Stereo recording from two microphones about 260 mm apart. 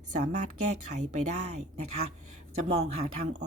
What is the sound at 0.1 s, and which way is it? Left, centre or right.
A woman's voice, right.